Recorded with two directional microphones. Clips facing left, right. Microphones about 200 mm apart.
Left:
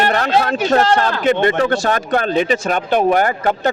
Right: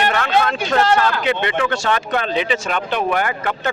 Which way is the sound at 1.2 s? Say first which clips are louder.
Left 5 dB; 45° left (ahead or behind).